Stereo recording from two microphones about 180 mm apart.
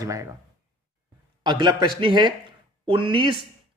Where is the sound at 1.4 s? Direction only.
25° right (ahead or behind).